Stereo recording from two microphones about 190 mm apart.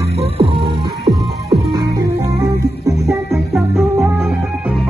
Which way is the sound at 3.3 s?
Centre (ahead or behind).